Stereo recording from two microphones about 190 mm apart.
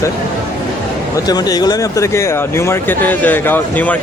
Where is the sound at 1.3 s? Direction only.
20° left (ahead or behind).